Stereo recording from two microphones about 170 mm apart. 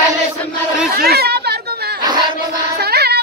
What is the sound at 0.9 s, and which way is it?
Chatter, 65° right (ahead or behind).